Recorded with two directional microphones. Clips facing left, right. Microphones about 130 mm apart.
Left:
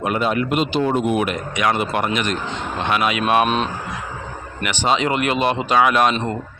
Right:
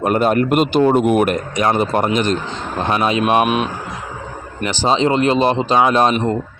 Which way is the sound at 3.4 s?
10° right (ahead or behind).